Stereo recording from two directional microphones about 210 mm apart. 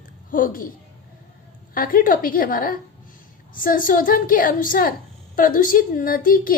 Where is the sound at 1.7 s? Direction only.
40° left (ahead or behind).